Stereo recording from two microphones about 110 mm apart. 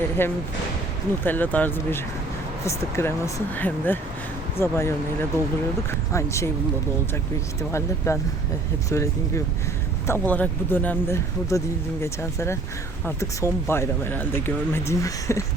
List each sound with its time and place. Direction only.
0.2 s speech: 20° left (ahead or behind)
7.7 s speech: 25° left (ahead or behind)
10.1 s speech: 15° left (ahead or behind)